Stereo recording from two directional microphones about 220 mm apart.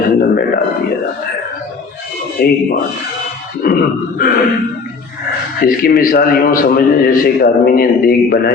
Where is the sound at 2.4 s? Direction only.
45° left (ahead or behind).